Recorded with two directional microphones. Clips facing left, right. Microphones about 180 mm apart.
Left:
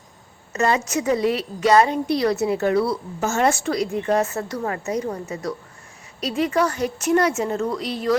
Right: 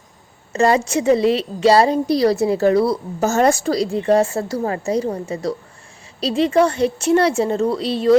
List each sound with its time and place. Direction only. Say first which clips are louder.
0.5 s a woman's voice: right 5 dB; 30° right (ahead or behind)